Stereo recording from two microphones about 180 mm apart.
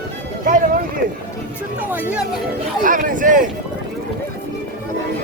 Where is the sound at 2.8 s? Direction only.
50° right (ahead or behind).